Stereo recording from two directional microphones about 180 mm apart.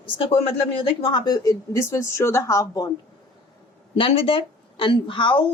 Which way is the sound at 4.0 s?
30° left (ahead or behind).